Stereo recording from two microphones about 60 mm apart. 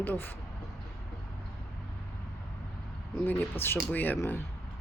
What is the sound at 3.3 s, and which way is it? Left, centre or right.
Speech, left.